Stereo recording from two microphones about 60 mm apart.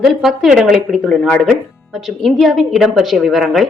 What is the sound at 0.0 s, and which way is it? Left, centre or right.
Speech, centre.